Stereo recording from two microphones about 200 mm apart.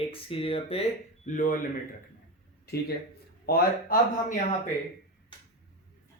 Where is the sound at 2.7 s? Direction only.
50° left (ahead or behind).